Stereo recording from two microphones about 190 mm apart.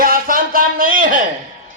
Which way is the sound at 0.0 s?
45° right (ahead or behind).